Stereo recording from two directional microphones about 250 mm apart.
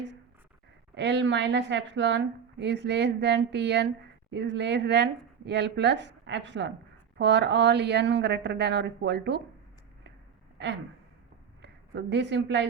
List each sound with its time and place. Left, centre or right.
0.9 s a woman's voice: right
11.6 s a woman's voice: right